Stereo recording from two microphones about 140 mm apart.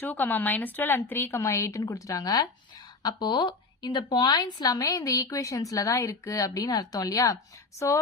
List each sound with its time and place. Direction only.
0.0 s a woman's voice: 15° left (ahead or behind)